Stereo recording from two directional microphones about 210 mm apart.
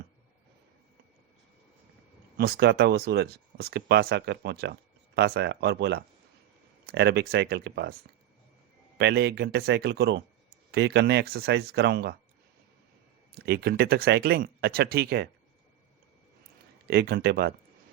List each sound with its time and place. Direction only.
2.4 s speech: 50° right (ahead or behind)
9.0 s speech: 50° right (ahead or behind)
13.4 s speech: 50° right (ahead or behind)
16.9 s speech: 50° right (ahead or behind)